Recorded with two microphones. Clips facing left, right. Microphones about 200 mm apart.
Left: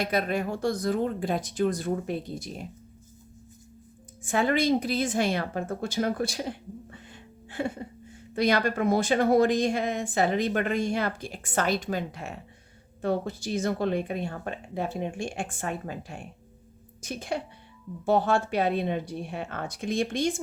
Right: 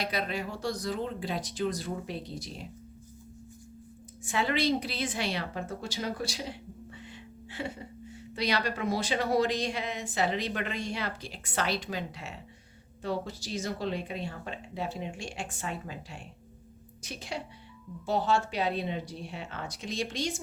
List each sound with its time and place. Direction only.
0.0 s a woman's voice: 50° left (ahead or behind)
4.2 s a woman's voice: 50° left (ahead or behind)